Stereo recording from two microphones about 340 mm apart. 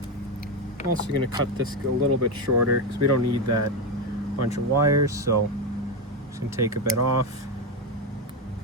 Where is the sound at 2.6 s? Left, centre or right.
Right.